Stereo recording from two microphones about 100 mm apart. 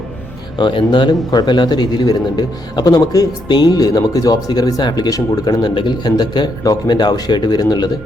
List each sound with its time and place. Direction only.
0.6 s speech: 50° left (ahead or behind)